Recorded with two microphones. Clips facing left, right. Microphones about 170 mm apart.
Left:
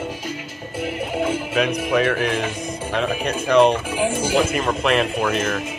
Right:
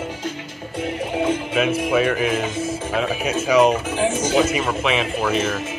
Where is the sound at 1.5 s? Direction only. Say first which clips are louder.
Even; centre (ahead or behind).